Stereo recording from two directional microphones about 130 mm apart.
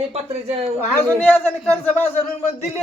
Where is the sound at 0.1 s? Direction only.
50° right (ahead or behind).